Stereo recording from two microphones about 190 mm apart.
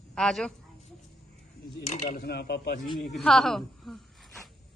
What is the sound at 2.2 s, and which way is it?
Speech, 60° left (ahead or behind).